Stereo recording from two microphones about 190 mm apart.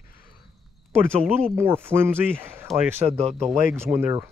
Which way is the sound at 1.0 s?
10° right (ahead or behind).